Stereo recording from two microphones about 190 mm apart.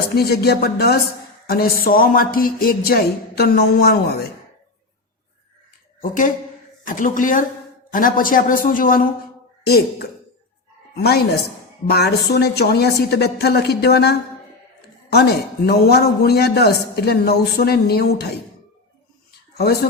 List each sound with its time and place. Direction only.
0.1 s a man's voice: 55° left (ahead or behind)
6.0 s a man's voice: 45° left (ahead or behind)
19.5 s a man's voice: 55° left (ahead or behind)